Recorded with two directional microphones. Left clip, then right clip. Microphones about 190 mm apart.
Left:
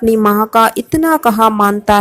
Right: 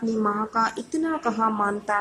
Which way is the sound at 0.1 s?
40° left (ahead or behind).